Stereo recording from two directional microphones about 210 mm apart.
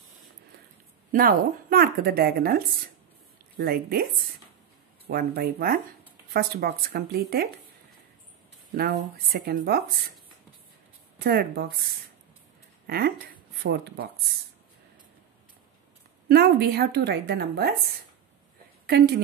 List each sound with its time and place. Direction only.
1.1 s a woman's voice: 45° right (ahead or behind)
8.7 s a woman's voice: 45° right (ahead or behind)
11.1 s a woman's voice: 45° right (ahead or behind)
12.8 s a woman's voice: 45° right (ahead or behind)
16.3 s a woman's voice: 45° right (ahead or behind)
18.9 s a woman's voice: 50° right (ahead or behind)